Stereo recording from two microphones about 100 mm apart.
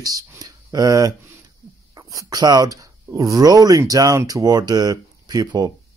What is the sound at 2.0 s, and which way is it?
Speech, 35° right (ahead or behind).